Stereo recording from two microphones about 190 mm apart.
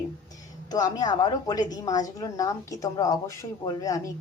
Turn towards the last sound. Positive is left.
turn(degrees=15)  # may be behind; listen again after turning